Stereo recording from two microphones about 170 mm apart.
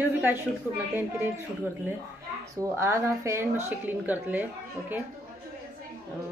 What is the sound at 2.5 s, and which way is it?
Speech, 15° right (ahead or behind).